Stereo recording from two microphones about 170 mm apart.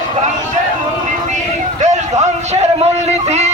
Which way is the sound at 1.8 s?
45° right (ahead or behind).